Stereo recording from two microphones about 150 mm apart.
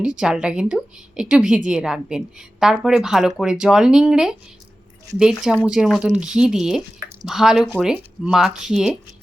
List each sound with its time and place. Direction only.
0.0 s a woman's voice: 5° right (ahead or behind)